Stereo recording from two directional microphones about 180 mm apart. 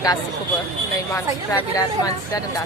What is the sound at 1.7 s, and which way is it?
Speech, 20° left (ahead or behind).